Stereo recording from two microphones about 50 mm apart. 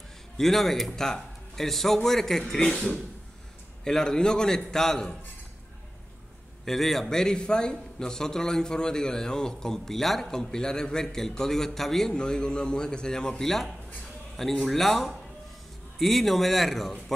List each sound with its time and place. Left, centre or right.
0.4 s a man's voice: centre
6.6 s a man's voice: centre
12.1 s a man's voice: centre